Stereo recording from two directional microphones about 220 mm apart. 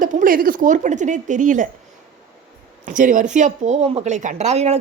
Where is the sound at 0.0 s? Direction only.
35° right (ahead or behind).